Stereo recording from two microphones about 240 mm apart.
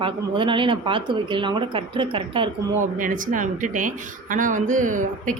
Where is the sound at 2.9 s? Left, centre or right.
Right.